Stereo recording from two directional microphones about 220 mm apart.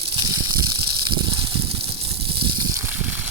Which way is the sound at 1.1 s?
25° right (ahead or behind).